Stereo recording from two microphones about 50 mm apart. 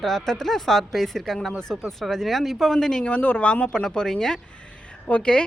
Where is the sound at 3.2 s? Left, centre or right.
Left.